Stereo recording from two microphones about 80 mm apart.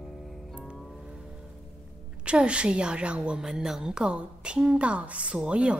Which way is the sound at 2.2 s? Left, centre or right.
Centre.